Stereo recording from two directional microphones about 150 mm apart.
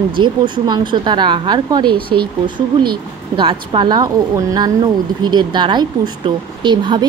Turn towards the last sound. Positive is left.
turn(degrees=-30)  # may be behind; listen again after turning